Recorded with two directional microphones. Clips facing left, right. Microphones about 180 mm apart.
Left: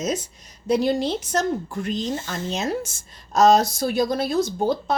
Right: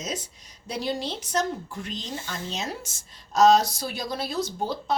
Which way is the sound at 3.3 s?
50° left (ahead or behind).